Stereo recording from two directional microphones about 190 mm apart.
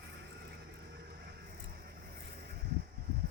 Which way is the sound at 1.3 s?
60° right (ahead or behind).